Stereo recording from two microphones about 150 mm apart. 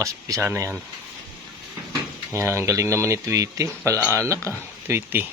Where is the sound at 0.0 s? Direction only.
20° right (ahead or behind).